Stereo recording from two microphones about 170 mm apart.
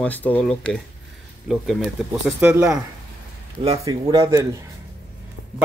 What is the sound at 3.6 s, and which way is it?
Speech, 35° right (ahead or behind).